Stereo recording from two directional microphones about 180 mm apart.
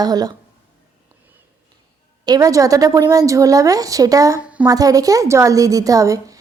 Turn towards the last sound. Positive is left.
turn(degrees=-20)  # may be behind; listen again after turning